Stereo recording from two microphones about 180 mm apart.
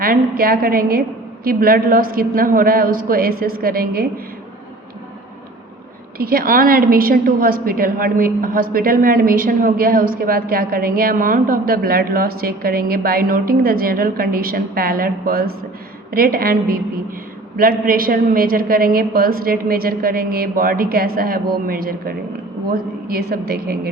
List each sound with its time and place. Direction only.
0.0 s a woman's voice: 55° right (ahead or behind)
6.1 s a woman's voice: 55° right (ahead or behind)